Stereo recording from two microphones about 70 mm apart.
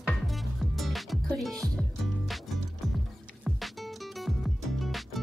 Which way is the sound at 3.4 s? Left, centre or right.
Centre.